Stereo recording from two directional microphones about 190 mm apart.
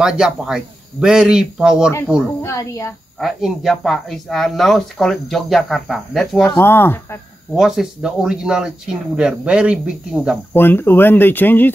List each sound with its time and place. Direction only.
0.0 s speech: 5° right (ahead or behind)
2.4 s speech: 15° left (ahead or behind)
3.2 s speech: centre (ahead or behind)
6.5 s speech: 10° left (ahead or behind)
7.5 s speech: centre (ahead or behind)
10.5 s speech: 10° left (ahead or behind)